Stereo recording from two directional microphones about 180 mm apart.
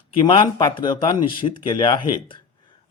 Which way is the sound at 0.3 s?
25° left (ahead or behind).